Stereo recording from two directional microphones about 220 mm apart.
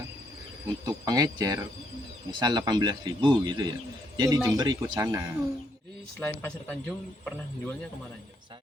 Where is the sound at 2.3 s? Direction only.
20° right (ahead or behind).